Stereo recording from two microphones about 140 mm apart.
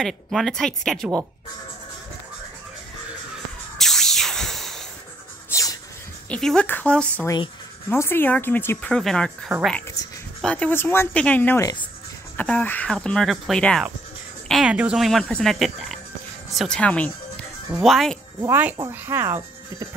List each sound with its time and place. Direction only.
0.0 s speech: centre (ahead or behind)
3.7 s music: centre (ahead or behind)
5.5 s music: 25° left (ahead or behind)
6.2 s speech: 5° left (ahead or behind)
14.5 s speech: 5° right (ahead or behind)
18.4 s speech: 15° right (ahead or behind)